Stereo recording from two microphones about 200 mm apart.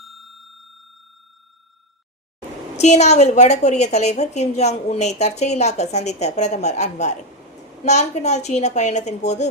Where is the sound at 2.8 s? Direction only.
35° left (ahead or behind).